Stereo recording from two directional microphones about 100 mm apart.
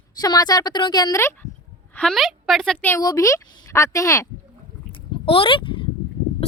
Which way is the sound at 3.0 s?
35° left (ahead or behind).